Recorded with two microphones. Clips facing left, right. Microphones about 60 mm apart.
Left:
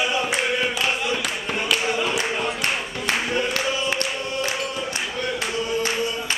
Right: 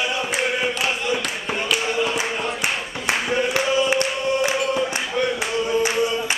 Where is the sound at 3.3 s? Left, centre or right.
Centre.